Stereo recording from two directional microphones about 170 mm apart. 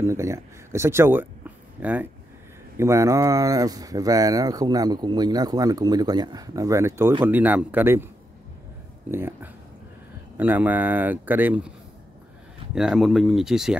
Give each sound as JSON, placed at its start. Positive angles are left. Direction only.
{"t": 0.0, "sound": "speech", "side_deg": -15}
{"t": 9.1, "sound": "speech", "side_deg": -15}
{"t": 12.7, "sound": "speech", "side_deg": -5}